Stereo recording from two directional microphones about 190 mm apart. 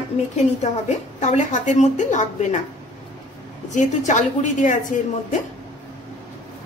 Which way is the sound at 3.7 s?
40° left (ahead or behind).